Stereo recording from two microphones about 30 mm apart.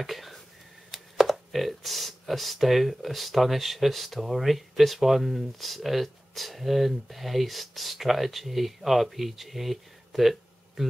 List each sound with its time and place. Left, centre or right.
0.0 s speech: centre
10.8 s speech: centre